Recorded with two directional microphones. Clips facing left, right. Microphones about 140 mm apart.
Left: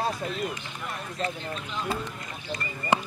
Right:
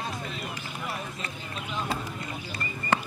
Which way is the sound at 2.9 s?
15° left (ahead or behind).